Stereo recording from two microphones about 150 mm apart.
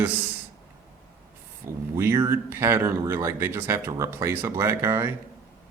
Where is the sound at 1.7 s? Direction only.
20° right (ahead or behind).